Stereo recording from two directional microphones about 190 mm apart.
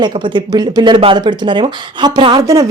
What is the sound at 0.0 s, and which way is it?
Speech, 25° right (ahead or behind).